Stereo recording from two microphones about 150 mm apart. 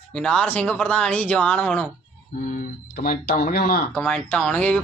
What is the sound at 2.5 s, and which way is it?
Speech, 70° left (ahead or behind).